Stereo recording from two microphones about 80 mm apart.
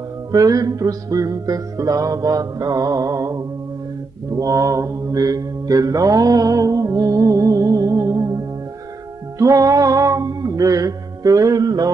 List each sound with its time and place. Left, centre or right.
0.3 s music: right
4.3 s mantra: right
9.4 s music: right